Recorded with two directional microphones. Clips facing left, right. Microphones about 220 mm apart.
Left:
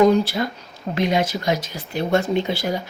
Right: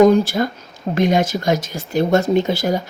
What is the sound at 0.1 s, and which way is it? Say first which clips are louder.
Speech: right 3 dB; 50° right (ahead or behind).